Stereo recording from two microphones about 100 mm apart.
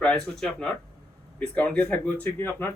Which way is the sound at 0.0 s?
5° left (ahead or behind).